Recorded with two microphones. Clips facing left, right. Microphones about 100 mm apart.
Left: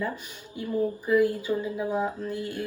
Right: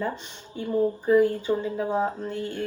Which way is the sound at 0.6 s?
25° right (ahead or behind).